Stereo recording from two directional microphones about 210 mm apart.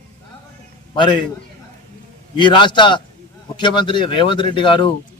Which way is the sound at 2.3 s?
20° left (ahead or behind).